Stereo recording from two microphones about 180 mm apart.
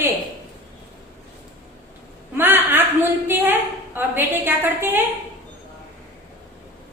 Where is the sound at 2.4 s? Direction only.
10° right (ahead or behind).